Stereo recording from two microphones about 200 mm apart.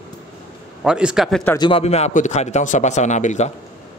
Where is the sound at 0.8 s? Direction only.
5° right (ahead or behind).